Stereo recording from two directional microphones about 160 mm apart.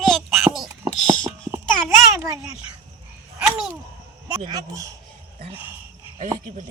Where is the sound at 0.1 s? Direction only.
Centre (ahead or behind).